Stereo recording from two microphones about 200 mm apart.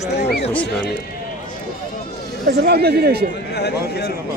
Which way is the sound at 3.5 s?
55° left (ahead or behind).